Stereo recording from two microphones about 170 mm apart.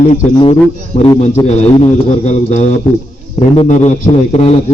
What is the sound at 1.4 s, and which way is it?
A man's voice, 35° left (ahead or behind).